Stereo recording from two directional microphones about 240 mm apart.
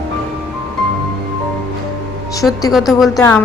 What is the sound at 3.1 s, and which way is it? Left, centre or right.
Speech, centre.